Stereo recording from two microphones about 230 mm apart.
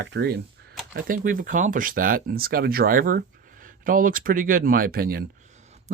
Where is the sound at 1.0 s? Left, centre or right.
Right.